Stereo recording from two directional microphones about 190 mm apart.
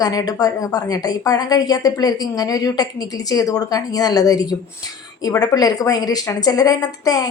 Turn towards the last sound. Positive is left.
turn(degrees=20)  # may be behind; listen again after turning